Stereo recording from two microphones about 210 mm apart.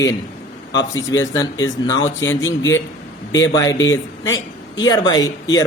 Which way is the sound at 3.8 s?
65° left (ahead or behind).